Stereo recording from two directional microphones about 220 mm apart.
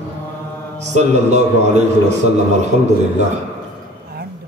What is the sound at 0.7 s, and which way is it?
A man's voice, 30° right (ahead or behind).